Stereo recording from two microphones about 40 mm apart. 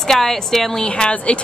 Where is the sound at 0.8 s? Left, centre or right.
Left.